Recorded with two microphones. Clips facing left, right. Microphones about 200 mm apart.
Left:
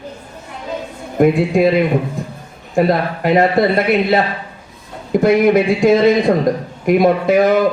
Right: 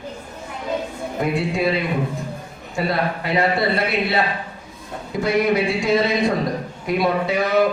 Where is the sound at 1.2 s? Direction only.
50° left (ahead or behind).